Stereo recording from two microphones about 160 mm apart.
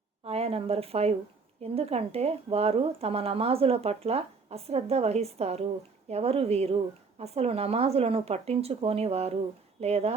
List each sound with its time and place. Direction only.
0.3 s speech: 40° right (ahead or behind)